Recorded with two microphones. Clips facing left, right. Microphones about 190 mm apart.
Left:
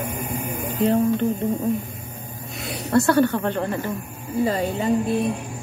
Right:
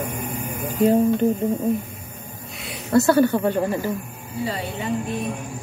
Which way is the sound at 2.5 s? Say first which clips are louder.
Left 6 dB; 40° left (ahead or behind).